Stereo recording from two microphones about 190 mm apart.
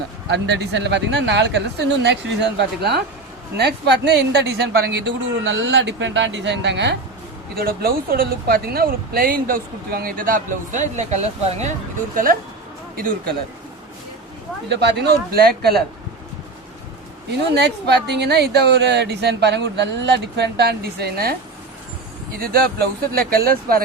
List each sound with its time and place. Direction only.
0.3 s speech: 65° right (ahead or behind)
7.5 s speech: 55° right (ahead or behind); by 11.7 s 35° right (ahead or behind)
12.1 s speech: 45° right (ahead or behind)
14.7 s a woman's voice: 60° right (ahead or behind)
17.5 s a woman's voice: 60° right (ahead or behind)
22.4 s speech: 50° right (ahead or behind)